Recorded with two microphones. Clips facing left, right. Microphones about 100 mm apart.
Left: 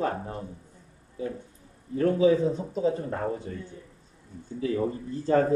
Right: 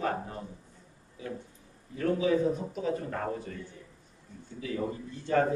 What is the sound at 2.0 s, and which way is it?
A man's voice, 30° left (ahead or behind).